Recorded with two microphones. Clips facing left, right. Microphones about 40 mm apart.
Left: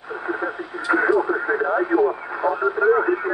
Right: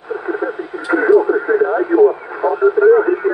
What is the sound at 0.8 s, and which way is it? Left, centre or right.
Radio, centre.